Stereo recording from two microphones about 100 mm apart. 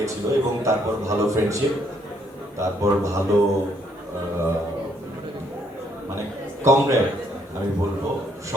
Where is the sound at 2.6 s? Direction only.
30° right (ahead or behind).